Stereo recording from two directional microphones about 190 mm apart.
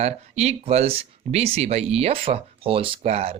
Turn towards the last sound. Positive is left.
turn(degrees=-30)  # may be behind; listen again after turning